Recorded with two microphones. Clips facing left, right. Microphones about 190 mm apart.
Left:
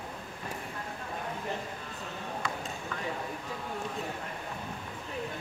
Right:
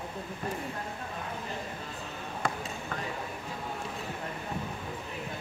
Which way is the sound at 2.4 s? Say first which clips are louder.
Right 6 dB; 50° right (ahead or behind).